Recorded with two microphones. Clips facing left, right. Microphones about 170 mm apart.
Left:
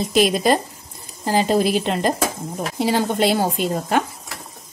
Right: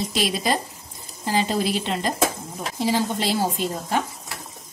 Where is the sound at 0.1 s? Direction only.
55° left (ahead or behind).